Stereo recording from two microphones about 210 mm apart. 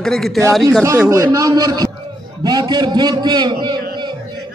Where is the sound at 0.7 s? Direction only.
10° right (ahead or behind).